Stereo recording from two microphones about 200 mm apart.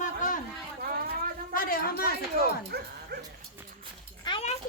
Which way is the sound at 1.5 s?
45° left (ahead or behind).